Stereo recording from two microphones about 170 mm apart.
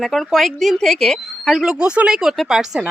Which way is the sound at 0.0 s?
Centre (ahead or behind).